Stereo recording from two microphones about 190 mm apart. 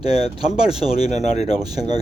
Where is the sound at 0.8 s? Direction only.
35° left (ahead or behind).